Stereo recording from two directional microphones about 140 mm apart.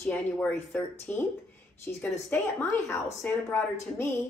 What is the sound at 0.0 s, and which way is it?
A woman's voice, 10° left (ahead or behind).